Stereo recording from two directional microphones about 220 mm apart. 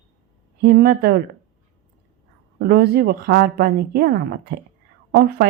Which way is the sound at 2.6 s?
45° right (ahead or behind).